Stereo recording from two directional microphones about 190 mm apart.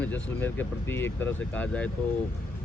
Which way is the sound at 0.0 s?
10° left (ahead or behind).